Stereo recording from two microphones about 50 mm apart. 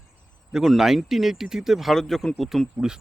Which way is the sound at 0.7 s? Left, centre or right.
Centre.